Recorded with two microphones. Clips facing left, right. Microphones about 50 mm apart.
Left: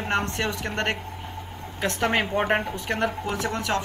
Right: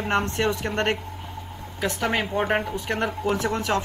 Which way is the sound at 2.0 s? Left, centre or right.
Centre.